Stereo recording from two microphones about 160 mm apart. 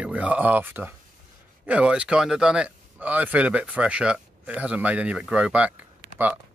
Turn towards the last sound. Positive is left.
turn(degrees=-10)  # may be behind; listen again after turning